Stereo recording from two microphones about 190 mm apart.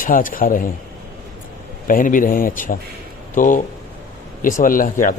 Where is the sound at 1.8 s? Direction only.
45° left (ahead or behind).